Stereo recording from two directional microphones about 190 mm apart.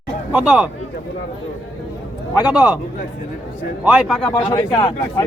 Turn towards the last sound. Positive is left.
turn(degrees=20)  # may be behind; listen again after turning